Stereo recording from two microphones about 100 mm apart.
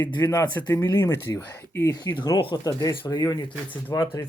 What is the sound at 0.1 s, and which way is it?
Speech, 45° left (ahead or behind).